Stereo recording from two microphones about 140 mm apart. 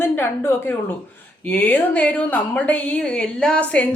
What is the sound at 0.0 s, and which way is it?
Speech, 15° left (ahead or behind).